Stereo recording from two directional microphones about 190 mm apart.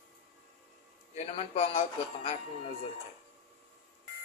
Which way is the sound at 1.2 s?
35° left (ahead or behind).